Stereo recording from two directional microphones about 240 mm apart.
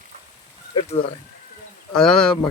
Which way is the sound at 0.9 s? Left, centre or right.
Left.